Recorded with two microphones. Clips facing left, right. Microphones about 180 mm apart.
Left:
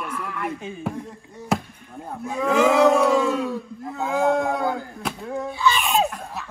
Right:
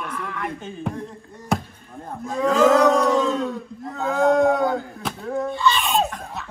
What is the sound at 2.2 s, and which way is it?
Speech, 10° left (ahead or behind).